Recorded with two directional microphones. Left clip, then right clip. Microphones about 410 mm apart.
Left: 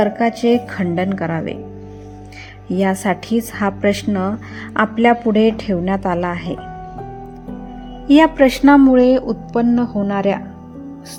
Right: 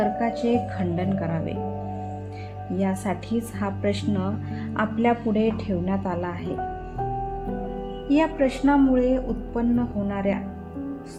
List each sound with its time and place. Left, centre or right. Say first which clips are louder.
0.0 s speech: left 8 dB; centre
2.7 s speech: left 10 dB; centre
8.1 s speech: left 11 dB; centre